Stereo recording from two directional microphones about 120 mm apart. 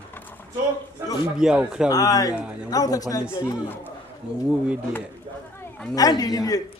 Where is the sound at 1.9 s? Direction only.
30° left (ahead or behind).